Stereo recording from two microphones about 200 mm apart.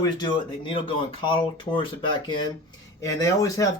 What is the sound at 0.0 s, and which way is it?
Speech, 25° left (ahead or behind).